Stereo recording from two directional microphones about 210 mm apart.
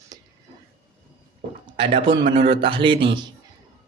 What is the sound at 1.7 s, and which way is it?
Speech, 25° right (ahead or behind).